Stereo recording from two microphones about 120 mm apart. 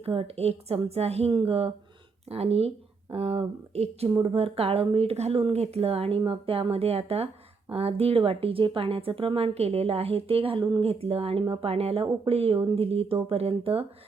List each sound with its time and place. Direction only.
0.0 s speech: 50° right (ahead or behind)
1.3 s speech: 45° right (ahead or behind)